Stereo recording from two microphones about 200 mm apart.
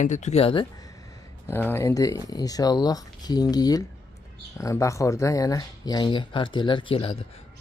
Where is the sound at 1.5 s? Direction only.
10° left (ahead or behind).